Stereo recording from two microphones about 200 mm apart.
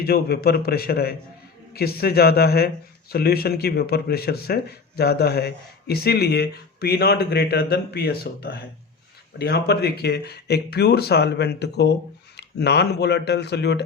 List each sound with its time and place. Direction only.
0.0 s speech: 50° left (ahead or behind)